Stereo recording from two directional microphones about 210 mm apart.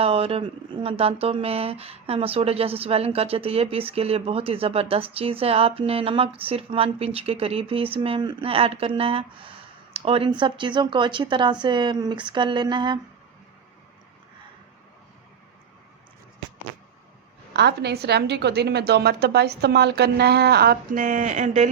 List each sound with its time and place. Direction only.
0.0 s speech: 30° right (ahead or behind)
17.5 s a woman's voice: 50° right (ahead or behind); by 21.7 s 35° right (ahead or behind)